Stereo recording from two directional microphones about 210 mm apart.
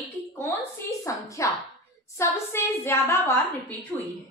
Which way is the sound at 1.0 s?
15° left (ahead or behind).